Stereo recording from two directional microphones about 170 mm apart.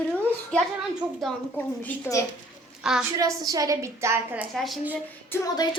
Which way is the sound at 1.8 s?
20° left (ahead or behind).